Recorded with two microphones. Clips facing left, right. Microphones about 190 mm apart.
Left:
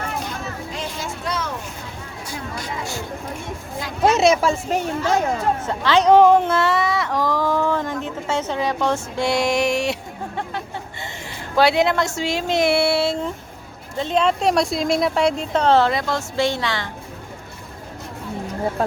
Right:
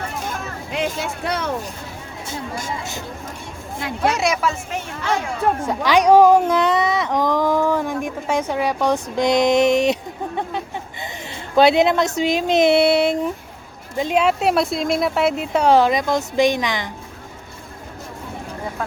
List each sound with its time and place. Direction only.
0.3 s a sound: 65° right (ahead or behind)
1.0 s speech: 60° right (ahead or behind)
3.8 s speech: 60° right (ahead or behind)
4.1 s speech: 25° left (ahead or behind)
5.6 s speech: 15° right (ahead or behind)
18.8 s speech: 35° left (ahead or behind)